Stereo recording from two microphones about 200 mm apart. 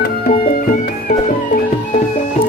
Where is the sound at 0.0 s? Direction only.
50° left (ahead or behind).